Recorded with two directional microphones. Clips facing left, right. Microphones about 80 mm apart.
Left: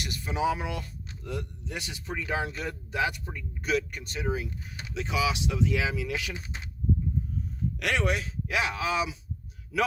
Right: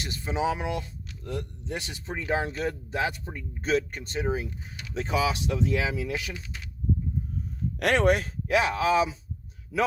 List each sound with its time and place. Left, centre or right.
0.0 s speech: right
6.3 s speech: left
7.8 s speech: right